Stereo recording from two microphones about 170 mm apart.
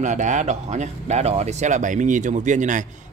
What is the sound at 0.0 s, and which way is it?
Speech, 45° right (ahead or behind).